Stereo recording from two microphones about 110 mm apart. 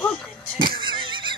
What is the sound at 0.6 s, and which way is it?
Neigh, 45° right (ahead or behind).